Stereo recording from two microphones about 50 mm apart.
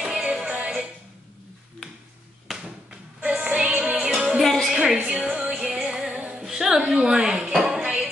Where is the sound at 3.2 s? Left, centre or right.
Right.